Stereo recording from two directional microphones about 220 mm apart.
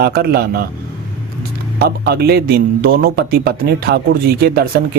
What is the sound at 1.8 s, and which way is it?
A man's voice, 45° right (ahead or behind).